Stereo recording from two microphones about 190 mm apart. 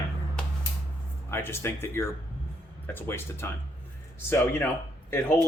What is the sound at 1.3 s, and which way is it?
Speech, 15° left (ahead or behind).